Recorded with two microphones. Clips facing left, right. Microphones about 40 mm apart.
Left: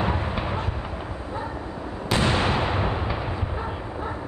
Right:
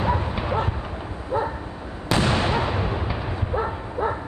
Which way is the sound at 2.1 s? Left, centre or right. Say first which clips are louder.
Right 1 dB; left.